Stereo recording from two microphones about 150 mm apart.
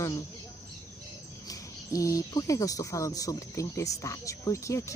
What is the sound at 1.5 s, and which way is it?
Speech, 20° left (ahead or behind).